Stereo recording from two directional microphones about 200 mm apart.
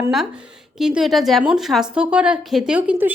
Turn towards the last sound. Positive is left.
turn(degrees=-5)  # may be behind; listen again after turning